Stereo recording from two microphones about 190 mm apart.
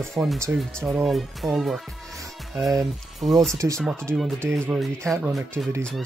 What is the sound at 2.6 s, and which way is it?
Speech, 15° right (ahead or behind).